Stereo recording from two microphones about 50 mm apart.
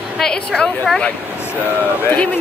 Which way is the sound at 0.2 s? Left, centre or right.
Centre.